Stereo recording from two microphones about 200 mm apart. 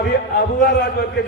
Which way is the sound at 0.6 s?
55° left (ahead or behind).